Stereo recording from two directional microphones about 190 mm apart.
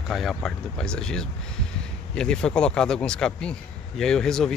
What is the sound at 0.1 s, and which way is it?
Speech, centre (ahead or behind).